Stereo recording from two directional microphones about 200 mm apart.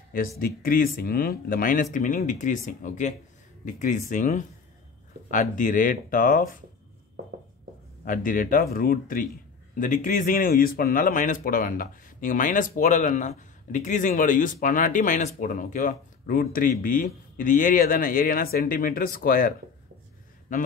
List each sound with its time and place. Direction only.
0.6 s a man's voice: 45° left (ahead or behind)
8.0 s a man's voice: 45° left (ahead or behind)